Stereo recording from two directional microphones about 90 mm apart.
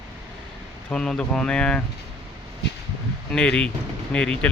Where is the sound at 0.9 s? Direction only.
10° left (ahead or behind).